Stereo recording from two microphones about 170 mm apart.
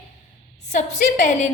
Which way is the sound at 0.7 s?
45° left (ahead or behind).